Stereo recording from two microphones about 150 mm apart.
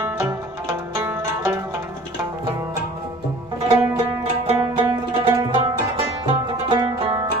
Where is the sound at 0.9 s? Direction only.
20° right (ahead or behind).